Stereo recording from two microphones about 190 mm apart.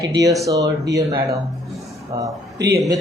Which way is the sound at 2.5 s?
65° right (ahead or behind).